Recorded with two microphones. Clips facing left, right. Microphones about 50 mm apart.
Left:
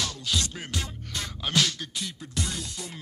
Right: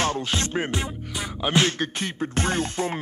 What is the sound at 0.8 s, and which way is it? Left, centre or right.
Music, right.